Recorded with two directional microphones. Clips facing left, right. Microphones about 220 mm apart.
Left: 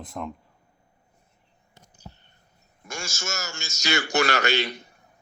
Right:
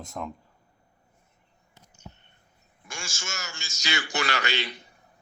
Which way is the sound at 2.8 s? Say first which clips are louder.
Left 5 dB; 40° left (ahead or behind).